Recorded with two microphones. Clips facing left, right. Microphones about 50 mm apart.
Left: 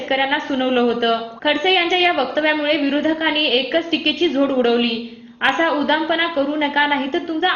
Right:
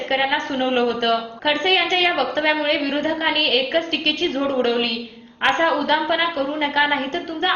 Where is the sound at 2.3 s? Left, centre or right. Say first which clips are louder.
Left 2 dB; centre.